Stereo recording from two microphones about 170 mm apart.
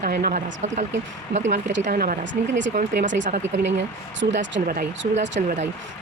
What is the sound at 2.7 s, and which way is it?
Speech, 50° right (ahead or behind).